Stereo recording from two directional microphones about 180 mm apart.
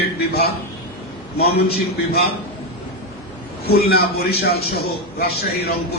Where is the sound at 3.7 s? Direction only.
60° left (ahead or behind).